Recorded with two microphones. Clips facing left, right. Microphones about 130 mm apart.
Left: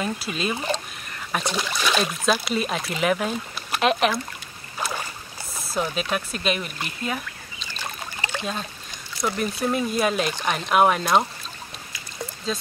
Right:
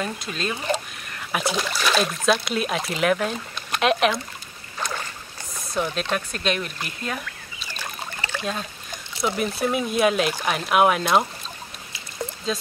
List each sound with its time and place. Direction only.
0.0 s speech: 5° left (ahead or behind)
4.7 s boat: 10° left (ahead or behind)
5.7 s speech: 5° left (ahead or behind)
8.2 s trickle: 20° left (ahead or behind)
9.2 s speech: 5° right (ahead or behind)
12.5 s speech: centre (ahead or behind)